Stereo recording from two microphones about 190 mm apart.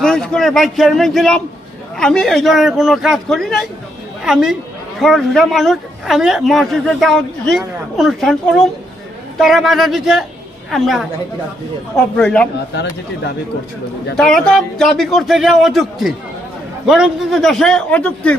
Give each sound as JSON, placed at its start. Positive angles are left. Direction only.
{"t": 0.0, "sound": "a man's voice", "side_deg": 0}
{"t": 12.1, "sound": "speech", "side_deg": 5}
{"t": 12.7, "sound": "speech", "side_deg": 65}
{"t": 14.2, "sound": "a man's voice", "side_deg": 0}